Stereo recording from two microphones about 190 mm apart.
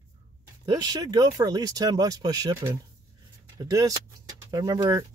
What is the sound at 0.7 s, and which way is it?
Speech, 20° right (ahead or behind).